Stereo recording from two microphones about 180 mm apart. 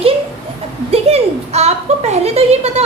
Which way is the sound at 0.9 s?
35° right (ahead or behind).